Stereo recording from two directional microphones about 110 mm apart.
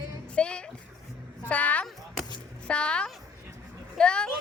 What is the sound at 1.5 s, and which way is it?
A woman's voice, 15° left (ahead or behind).